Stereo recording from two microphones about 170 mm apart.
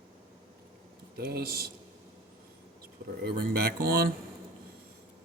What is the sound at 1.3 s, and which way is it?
Speech, 65° right (ahead or behind).